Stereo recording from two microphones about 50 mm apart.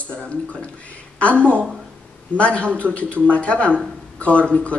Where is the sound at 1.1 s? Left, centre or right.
Left.